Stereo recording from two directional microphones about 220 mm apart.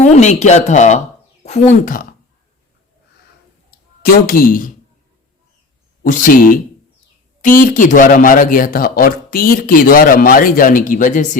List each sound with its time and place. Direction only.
0.0 s speech: 30° left (ahead or behind)
3.7 s speech: 45° left (ahead or behind)
6.0 s speech: 35° left (ahead or behind)